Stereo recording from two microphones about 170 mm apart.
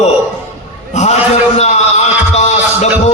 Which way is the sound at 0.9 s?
40° left (ahead or behind).